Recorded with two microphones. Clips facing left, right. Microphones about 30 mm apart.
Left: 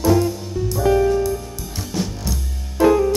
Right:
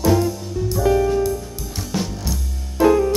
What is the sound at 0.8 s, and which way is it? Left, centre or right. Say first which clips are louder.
Music: left 1 dB; centre.